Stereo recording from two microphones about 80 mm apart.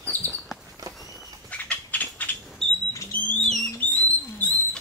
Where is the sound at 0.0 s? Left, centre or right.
Left.